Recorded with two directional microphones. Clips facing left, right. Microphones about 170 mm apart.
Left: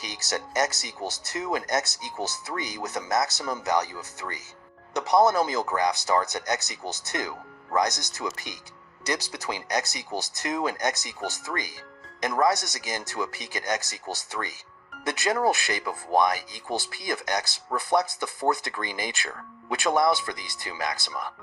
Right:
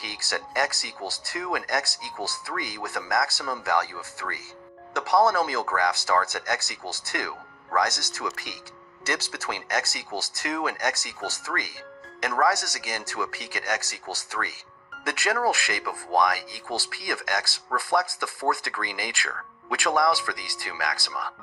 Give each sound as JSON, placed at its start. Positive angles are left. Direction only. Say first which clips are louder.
{"t": 0.0, "sound": "speech", "louder": "left 1 dB", "side_deg": 20}